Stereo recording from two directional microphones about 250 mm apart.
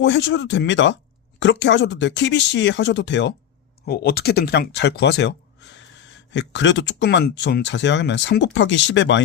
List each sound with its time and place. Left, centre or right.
0.0 s speech: left